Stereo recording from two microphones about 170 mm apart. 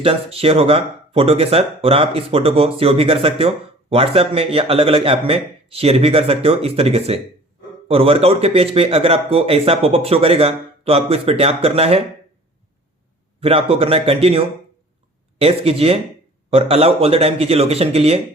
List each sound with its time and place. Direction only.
0.0 s speech: 35° right (ahead or behind)
13.4 s speech: 35° right (ahead or behind)